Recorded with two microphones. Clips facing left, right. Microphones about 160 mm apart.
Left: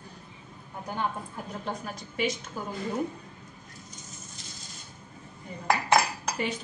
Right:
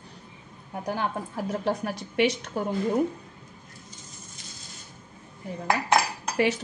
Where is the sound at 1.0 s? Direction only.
80° right.